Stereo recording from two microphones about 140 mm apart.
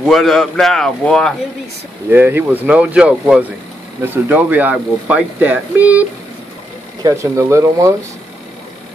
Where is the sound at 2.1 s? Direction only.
15° right (ahead or behind).